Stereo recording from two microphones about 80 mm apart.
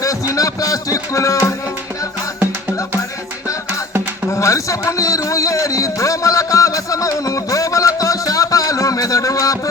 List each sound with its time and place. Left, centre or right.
0.0 s speech: left
4.3 s music: left